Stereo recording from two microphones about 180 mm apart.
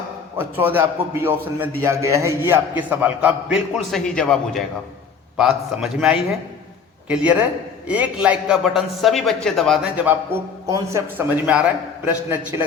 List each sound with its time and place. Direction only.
0.3 s a man's voice: 10° right (ahead or behind)